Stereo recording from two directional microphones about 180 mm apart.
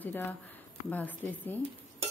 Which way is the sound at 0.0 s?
10° left (ahead or behind).